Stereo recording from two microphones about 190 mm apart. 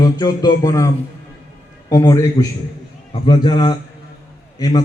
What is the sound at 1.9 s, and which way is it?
A man's voice, 20° left (ahead or behind).